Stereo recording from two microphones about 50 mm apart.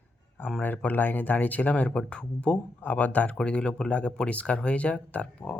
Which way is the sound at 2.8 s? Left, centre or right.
Left.